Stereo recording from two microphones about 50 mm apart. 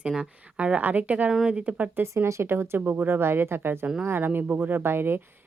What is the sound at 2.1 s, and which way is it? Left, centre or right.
Speech, right.